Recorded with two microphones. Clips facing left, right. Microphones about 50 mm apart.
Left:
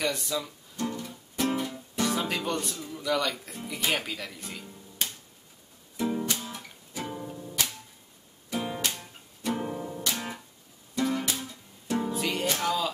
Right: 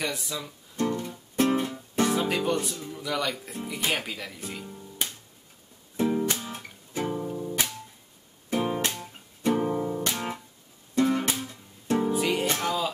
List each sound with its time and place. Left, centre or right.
0.0 s speech: centre
0.7 s music: right
1.5 s music: right
2.1 s speech: centre
6.2 s guitar: right
7.1 s music: centre
7.3 s music: right
12.0 s music: centre